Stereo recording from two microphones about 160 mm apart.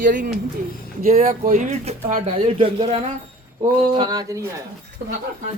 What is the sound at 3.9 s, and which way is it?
Speech, 25° right (ahead or behind).